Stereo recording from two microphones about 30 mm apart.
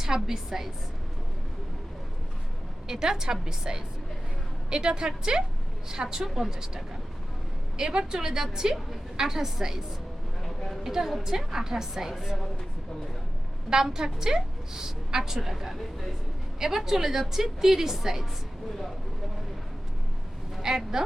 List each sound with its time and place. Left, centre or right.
0.0 s a woman's voice: centre
2.8 s a woman's voice: centre
6.2 s a woman's voice: centre
7.8 s a woman's voice: right
10.4 s a sound: centre
10.8 s a woman's voice: centre
13.8 s a woman's voice: centre
16.6 s a woman's voice: centre
20.6 s speech: right